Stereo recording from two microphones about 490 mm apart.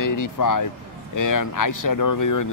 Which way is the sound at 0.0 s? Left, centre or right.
Left.